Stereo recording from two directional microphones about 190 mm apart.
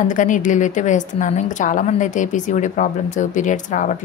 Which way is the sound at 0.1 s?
40° left (ahead or behind).